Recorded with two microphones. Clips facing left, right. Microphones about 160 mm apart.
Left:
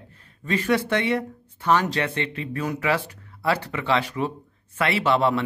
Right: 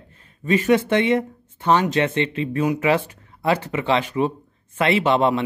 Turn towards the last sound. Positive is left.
turn(degrees=-20)  # may be behind; listen again after turning